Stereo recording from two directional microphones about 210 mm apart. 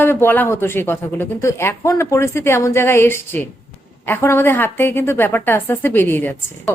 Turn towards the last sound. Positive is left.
turn(degrees=10)  # may be behind; listen again after turning